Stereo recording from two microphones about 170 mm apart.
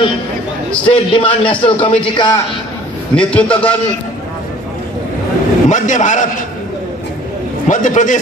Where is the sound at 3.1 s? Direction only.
5° left (ahead or behind).